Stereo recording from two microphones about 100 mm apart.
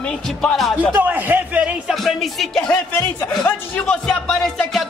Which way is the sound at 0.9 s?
15° right (ahead or behind).